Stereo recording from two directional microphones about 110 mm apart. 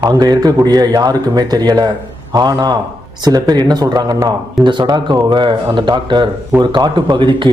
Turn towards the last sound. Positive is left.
turn(degrees=-45)  # may be behind; listen again after turning